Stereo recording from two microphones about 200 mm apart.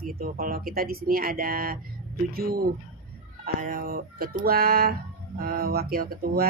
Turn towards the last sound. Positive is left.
turn(degrees=-50)  # may be behind; listen again after turning